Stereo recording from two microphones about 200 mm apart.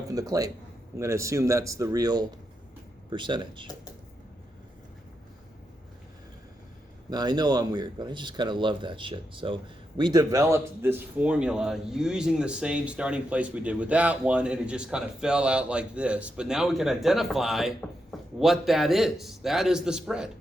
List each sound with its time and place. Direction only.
0.1 s speech: 15° right (ahead or behind)
7.1 s a man's voice: 20° right (ahead or behind); by 20.3 s 5° right (ahead or behind)